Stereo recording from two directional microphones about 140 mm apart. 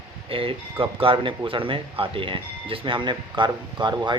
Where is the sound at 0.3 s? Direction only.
40° right (ahead or behind).